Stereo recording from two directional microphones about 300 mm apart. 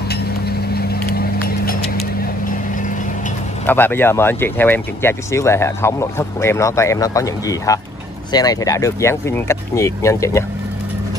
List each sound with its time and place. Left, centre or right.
0.7 s vehicle: left
3.6 s speech: centre